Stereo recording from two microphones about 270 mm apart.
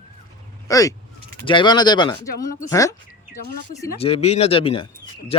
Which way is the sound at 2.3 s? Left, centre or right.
Left.